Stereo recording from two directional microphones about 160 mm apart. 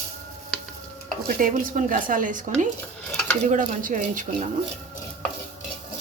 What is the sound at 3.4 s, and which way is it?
Speech, 50° right (ahead or behind).